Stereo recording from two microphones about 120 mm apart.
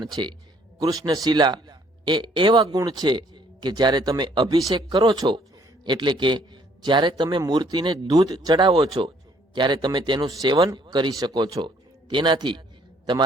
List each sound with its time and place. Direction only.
0.0 s a man's voice: 35° right (ahead or behind)
8.9 s a man's voice: 45° right (ahead or behind)